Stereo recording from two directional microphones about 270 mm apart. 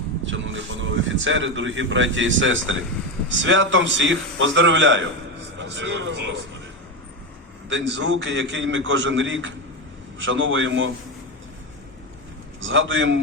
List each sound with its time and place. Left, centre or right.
0.3 s a man's voice: right
7.7 s a man's voice: right
12.6 s a man's voice: right